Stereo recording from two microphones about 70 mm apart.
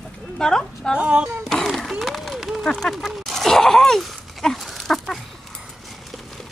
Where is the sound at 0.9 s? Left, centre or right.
Centre.